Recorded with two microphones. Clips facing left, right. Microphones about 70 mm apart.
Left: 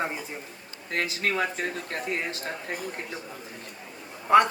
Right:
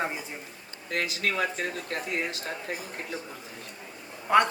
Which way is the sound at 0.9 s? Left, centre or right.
Left.